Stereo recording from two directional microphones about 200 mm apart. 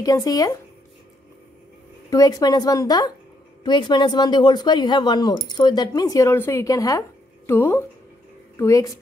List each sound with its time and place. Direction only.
0.0 s speech: 20° left (ahead or behind)
2.0 s speech: 15° left (ahead or behind)